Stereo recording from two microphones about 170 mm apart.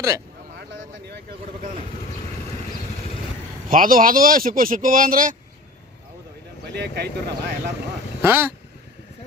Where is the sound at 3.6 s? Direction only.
55° right (ahead or behind).